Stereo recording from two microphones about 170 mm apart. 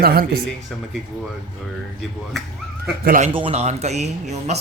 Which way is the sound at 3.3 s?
35° right (ahead or behind).